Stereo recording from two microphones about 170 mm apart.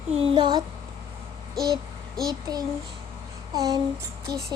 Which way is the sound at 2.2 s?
20° right (ahead or behind).